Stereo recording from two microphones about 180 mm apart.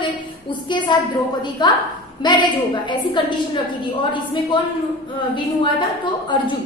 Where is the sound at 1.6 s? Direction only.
25° left (ahead or behind).